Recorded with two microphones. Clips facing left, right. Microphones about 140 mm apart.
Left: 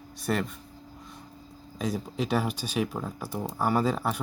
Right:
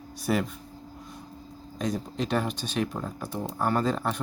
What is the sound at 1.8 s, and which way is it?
Speech, 5° left (ahead or behind).